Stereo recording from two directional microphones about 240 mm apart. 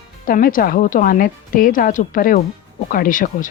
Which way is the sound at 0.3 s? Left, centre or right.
Left.